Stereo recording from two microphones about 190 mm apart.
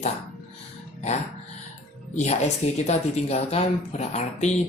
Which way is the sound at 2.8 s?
35° left (ahead or behind).